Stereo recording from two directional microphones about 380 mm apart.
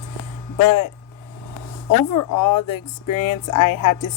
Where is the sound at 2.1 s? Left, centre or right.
Left.